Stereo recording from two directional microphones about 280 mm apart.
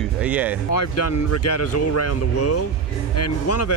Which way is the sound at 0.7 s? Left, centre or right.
Left.